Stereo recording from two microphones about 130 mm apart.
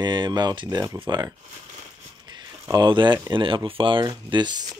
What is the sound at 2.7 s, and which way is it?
Speech, 35° right (ahead or behind).